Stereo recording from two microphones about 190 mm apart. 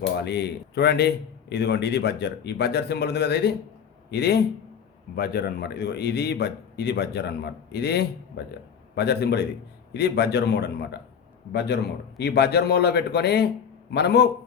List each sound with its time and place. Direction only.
0.3 s a man's voice: 60° left (ahead or behind)